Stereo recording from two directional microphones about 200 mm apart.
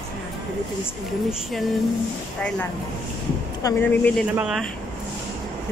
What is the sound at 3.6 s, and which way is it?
Speech, 15° left (ahead or behind).